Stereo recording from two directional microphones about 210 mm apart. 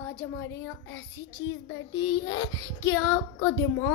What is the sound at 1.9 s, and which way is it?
Child singing, 20° left (ahead or behind).